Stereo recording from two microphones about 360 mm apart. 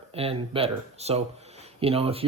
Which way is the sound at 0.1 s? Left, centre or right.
Centre.